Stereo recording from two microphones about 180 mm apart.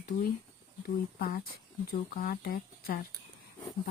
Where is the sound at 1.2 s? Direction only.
55° left (ahead or behind).